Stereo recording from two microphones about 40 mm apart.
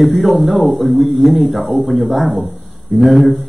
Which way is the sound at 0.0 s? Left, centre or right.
Centre.